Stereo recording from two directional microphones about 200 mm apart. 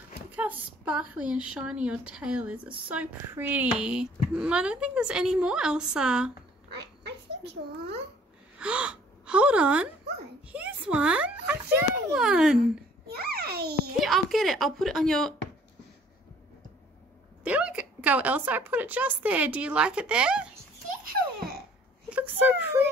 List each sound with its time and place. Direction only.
0.3 s speech: 10° right (ahead or behind)
8.5 s speech: 5° right (ahead or behind)
13.1 s a sound: 50° right (ahead or behind)
14.0 s speech: centre (ahead or behind)
17.5 s a woman's voice: 5° right (ahead or behind)
21.0 s baby laughter: 50° right (ahead or behind)
22.1 s a woman's voice: 10° right (ahead or behind)